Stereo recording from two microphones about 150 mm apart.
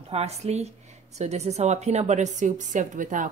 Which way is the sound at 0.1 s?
45° right (ahead or behind).